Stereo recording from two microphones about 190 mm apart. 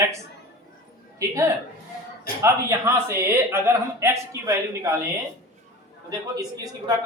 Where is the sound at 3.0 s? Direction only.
15° right (ahead or behind).